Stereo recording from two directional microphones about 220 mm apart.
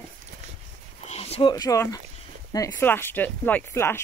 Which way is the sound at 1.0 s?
30° left (ahead or behind).